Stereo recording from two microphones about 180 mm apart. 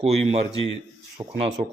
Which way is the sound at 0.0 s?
35° right (ahead or behind).